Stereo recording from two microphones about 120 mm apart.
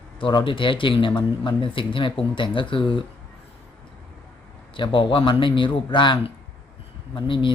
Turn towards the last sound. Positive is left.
turn(degrees=45)  # may be behind; listen again after turning